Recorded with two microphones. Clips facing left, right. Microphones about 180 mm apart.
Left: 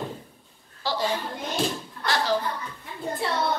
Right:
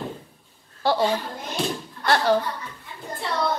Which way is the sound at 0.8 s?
55° right (ahead or behind).